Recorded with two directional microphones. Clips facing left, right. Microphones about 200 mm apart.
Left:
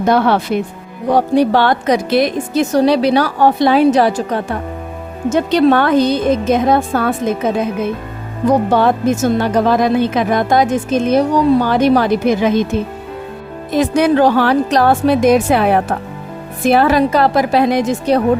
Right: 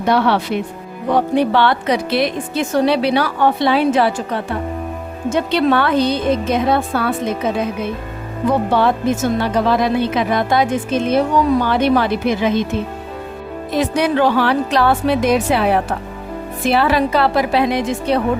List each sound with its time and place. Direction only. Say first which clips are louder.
0.0 s a woman's voice: left 3 dB; 45° left (ahead or behind)
8.4 s speech: left 3 dB; 45° left (ahead or behind)
13.7 s speech: left 4 dB; 45° left (ahead or behind)